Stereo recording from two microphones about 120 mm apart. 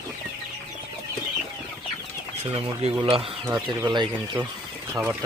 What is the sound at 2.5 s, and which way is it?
Speech, 55° right (ahead or behind).